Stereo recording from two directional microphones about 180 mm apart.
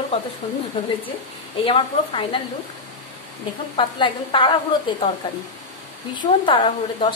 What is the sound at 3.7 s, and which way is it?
A woman's voice, 25° left (ahead or behind).